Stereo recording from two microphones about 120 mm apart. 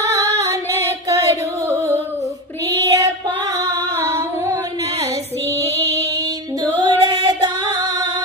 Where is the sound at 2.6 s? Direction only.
25° right (ahead or behind).